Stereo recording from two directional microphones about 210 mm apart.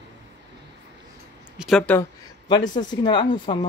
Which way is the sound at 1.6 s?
Centre (ahead or behind).